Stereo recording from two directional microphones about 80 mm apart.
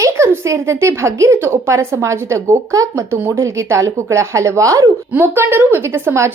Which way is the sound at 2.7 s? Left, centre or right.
Right.